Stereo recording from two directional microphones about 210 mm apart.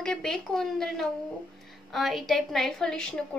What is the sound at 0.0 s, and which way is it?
A child's voice, centre (ahead or behind).